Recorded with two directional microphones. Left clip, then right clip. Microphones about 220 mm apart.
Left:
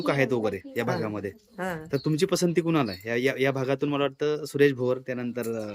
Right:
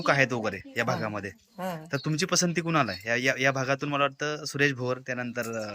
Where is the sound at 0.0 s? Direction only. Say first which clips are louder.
Even; 5° left (ahead or behind).